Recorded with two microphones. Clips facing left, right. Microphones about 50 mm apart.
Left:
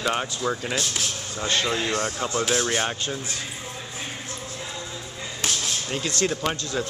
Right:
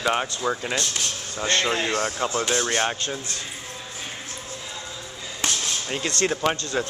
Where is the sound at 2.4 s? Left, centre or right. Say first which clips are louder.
Left 1 dB; centre.